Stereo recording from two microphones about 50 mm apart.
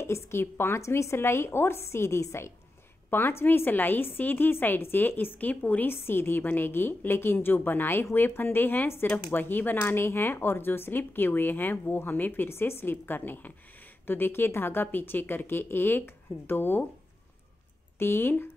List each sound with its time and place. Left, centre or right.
0.0 s a woman's voice: left
0.7 s a woman's voice: left
3.1 s a woman's voice: left
6.0 s a woman's voice: left
10.0 s a woman's voice: left
12.4 s a woman's voice: left
14.9 s a woman's voice: left
17.9 s speech: left